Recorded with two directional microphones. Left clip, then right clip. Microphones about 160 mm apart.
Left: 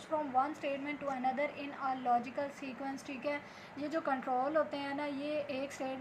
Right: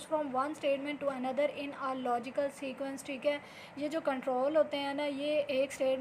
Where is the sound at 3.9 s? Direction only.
40° right (ahead or behind).